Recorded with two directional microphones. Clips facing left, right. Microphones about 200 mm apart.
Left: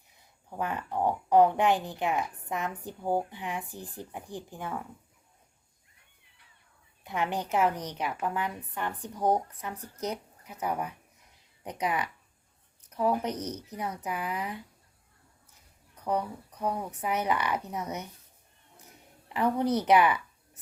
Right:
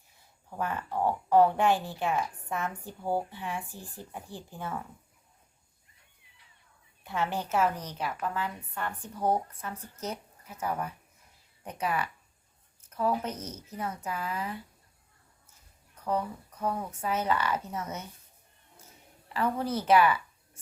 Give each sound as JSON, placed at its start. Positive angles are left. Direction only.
{"t": 0.5, "sound": "a woman's voice", "side_deg": 15}
{"t": 7.0, "sound": "a woman's voice", "side_deg": 15}
{"t": 16.0, "sound": "a woman's voice", "side_deg": 15}
{"t": 18.8, "sound": "a sound", "side_deg": 15}